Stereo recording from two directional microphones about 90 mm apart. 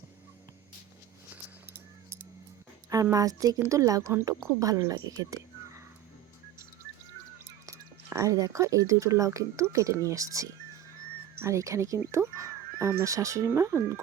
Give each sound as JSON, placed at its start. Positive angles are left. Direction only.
{"t": 2.9, "sound": "a woman's voice", "side_deg": -40}
{"t": 7.7, "sound": "a woman's voice", "side_deg": -35}